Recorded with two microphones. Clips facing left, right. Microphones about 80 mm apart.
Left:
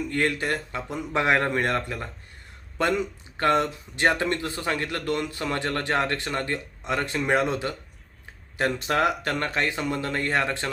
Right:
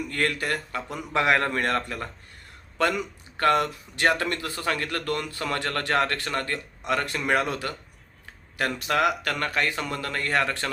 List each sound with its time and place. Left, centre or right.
0.1 s speech: left